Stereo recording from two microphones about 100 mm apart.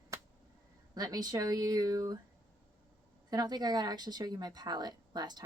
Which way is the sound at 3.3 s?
40° right (ahead or behind).